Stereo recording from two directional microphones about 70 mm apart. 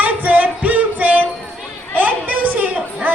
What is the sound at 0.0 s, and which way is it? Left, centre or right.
Music, right.